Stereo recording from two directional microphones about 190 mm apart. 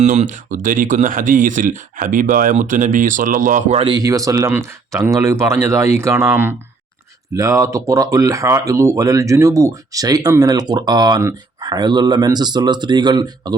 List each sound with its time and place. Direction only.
0.0 s speech: 40° right (ahead or behind); by 13.6 s 20° right (ahead or behind)